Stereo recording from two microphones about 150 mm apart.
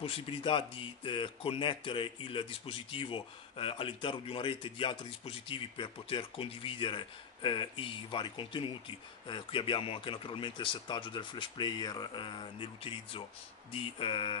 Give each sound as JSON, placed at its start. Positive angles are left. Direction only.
{"t": 0.0, "sound": "speech", "side_deg": 40}